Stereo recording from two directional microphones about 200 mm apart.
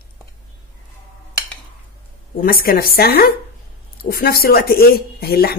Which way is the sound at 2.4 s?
45° left (ahead or behind).